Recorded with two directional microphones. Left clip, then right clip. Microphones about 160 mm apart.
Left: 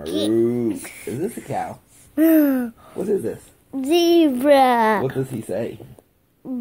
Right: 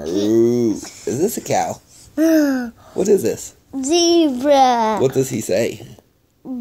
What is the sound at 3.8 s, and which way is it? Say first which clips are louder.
Child singing: right 1 dB; 5° left (ahead or behind).